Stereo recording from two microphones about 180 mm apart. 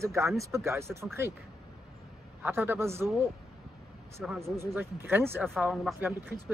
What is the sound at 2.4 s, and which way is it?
Speech, 10° right (ahead or behind).